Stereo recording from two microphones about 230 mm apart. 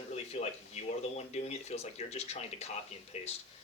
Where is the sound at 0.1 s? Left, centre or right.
Left.